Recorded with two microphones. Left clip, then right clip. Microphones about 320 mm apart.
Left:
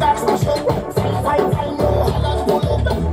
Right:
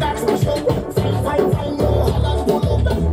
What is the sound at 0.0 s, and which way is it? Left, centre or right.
Music, centre.